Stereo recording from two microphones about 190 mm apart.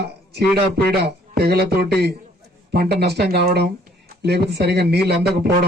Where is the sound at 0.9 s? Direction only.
60° right (ahead or behind).